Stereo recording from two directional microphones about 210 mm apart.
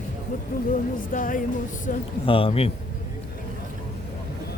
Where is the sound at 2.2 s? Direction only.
25° left (ahead or behind).